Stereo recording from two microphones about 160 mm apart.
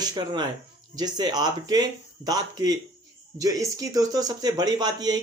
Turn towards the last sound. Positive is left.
turn(degrees=-25)  # may be behind; listen again after turning